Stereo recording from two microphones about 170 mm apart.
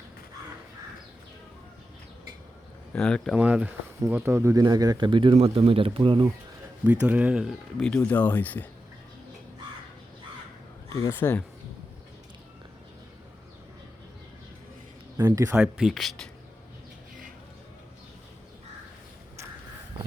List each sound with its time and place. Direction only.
2.9 s speech: 5° left (ahead or behind)
3.3 s speech: 10° right (ahead or behind); by 6.2 s 30° right (ahead or behind)
6.8 s speech: 10° right (ahead or behind); by 8.6 s 10° left (ahead or behind)
10.8 s speech: 15° left (ahead or behind)
15.2 s speech: 15° right (ahead or behind)
15.5 s speech: 5° right (ahead or behind)